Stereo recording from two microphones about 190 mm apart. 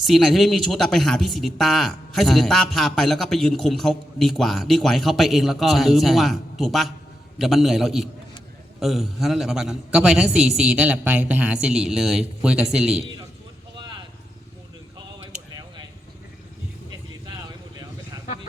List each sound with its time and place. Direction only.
0.0 s speech: centre (ahead or behind)
13.7 s vehicle: 20° right (ahead or behind)